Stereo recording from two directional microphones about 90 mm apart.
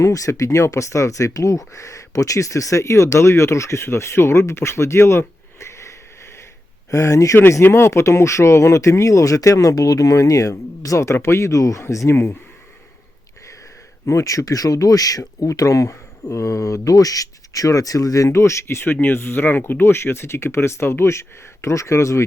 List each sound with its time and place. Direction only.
0.0 s speech: 35° left (ahead or behind)
7.3 s speech: 25° left (ahead or behind)
14.1 s speech: 35° left (ahead or behind)